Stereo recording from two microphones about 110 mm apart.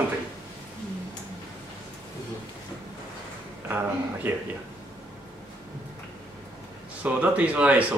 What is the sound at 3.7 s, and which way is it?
Speech, 15° right (ahead or behind).